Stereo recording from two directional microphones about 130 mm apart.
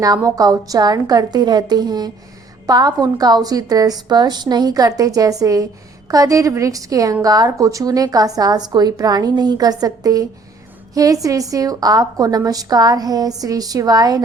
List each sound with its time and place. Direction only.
0.0 s a woman's voice: 30° right (ahead or behind)